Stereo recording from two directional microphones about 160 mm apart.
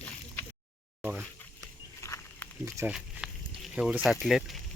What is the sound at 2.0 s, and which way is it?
Wild animals, 20° left (ahead or behind).